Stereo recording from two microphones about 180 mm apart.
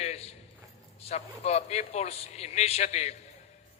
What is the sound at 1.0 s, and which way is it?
A man's voice, 35° left (ahead or behind).